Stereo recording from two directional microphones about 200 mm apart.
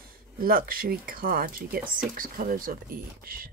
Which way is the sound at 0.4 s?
45° right (ahead or behind).